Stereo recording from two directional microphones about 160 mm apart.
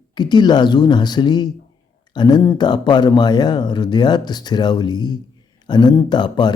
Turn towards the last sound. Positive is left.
turn(degrees=25)  # may be behind; listen again after turning